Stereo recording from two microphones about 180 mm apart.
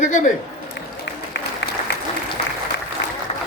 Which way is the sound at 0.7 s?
75° left (ahead or behind).